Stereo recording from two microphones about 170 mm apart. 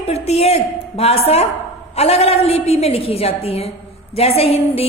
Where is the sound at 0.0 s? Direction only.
40° left (ahead or behind).